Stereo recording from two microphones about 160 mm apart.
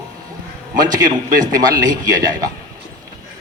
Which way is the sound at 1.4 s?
25° right (ahead or behind).